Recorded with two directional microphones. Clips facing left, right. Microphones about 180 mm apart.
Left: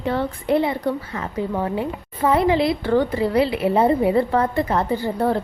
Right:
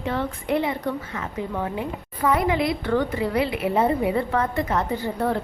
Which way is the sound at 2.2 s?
30° left (ahead or behind).